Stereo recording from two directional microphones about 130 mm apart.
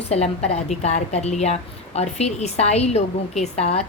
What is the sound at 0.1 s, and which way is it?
A woman's voice, 55° left (ahead or behind).